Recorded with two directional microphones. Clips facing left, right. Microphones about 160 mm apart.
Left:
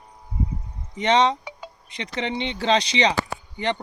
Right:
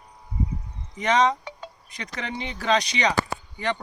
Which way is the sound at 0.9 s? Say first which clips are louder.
Left 2 dB; 30° left (ahead or behind).